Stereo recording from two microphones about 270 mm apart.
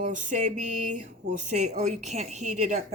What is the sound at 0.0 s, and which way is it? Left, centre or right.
Speech, right.